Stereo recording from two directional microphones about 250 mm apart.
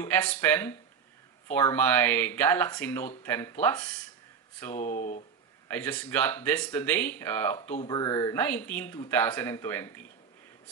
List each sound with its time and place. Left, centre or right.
0.0 s speech: centre
4.7 s speech: left
5.7 s speech: centre